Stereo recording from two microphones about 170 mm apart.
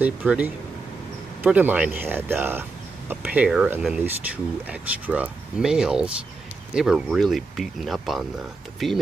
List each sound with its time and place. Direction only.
0.0 s speech: 10° right (ahead or behind)